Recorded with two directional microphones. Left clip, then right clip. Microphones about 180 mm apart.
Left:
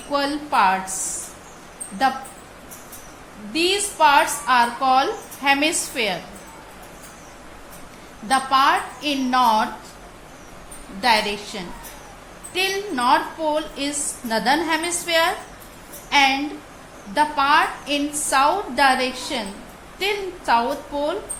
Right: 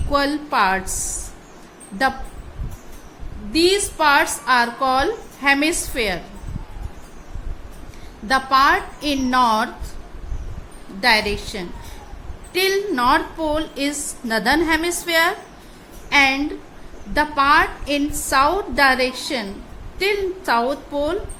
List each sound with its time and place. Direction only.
0.1 s a woman's voice: 30° right (ahead or behind)
3.5 s a woman's voice: 35° right (ahead or behind)
8.3 s a woman's voice: 30° right (ahead or behind)
11.0 s a woman's voice: 30° right (ahead or behind)